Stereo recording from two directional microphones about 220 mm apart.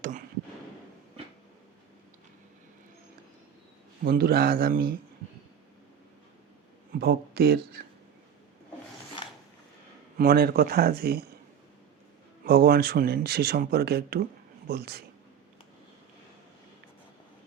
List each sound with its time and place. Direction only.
4.0 s speech: 40° right (ahead or behind)
6.9 s speech: 45° right (ahead or behind)
10.2 s speech: 45° right (ahead or behind)
12.5 s speech: 45° right (ahead or behind)